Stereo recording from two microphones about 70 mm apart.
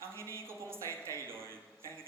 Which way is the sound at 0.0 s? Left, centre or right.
Right.